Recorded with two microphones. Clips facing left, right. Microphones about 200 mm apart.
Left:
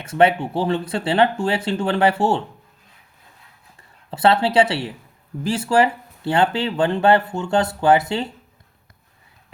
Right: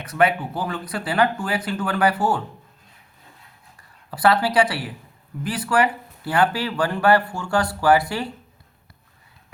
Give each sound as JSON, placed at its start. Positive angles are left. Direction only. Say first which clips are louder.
{"t": 0.0, "sound": "speech", "louder": "left 4 dB", "side_deg": 25}
{"t": 3.8, "sound": "speech", "louder": "left 3 dB", "side_deg": 25}